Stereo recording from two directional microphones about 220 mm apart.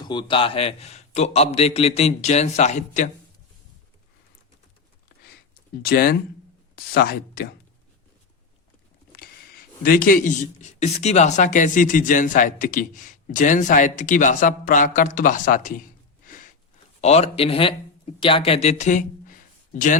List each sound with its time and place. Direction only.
0.0 s a man's voice: 20° left (ahead or behind)
5.8 s speech: 45° left (ahead or behind)
9.8 s speech: 40° left (ahead or behind)
16.2 s a sound: 35° left (ahead or behind)
17.0 s speech: 30° left (ahead or behind)